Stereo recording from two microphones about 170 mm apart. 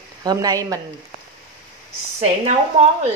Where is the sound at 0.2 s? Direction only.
25° right (ahead or behind).